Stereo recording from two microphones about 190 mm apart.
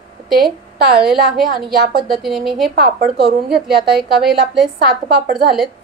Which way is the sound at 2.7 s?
55° right (ahead or behind).